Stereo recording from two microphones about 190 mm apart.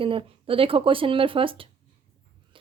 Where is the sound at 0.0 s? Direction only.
30° right (ahead or behind).